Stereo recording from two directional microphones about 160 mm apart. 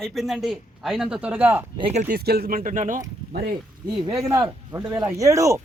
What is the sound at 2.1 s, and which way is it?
Speech, 75° right (ahead or behind).